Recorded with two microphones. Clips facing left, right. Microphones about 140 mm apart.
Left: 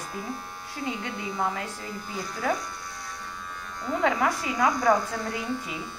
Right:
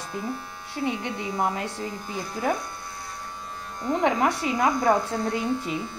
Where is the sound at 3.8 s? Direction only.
20° right (ahead or behind).